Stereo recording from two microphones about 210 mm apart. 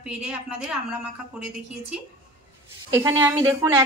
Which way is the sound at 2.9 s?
15° right (ahead or behind).